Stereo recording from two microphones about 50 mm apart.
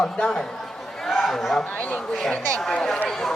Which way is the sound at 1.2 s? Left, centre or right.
Centre.